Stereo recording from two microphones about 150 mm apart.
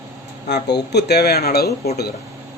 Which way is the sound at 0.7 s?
90° left.